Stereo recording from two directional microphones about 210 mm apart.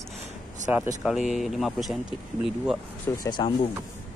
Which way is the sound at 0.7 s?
5° right (ahead or behind).